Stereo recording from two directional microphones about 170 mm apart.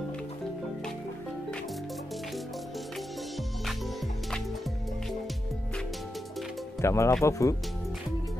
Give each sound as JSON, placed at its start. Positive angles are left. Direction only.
{"t": 6.8, "sound": "speech", "side_deg": 15}